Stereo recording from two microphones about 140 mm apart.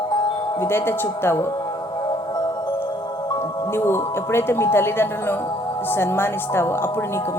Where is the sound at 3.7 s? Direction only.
15° left (ahead or behind).